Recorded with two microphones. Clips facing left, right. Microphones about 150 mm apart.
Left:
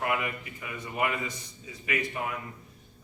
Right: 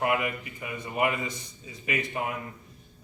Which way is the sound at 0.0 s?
20° right (ahead or behind).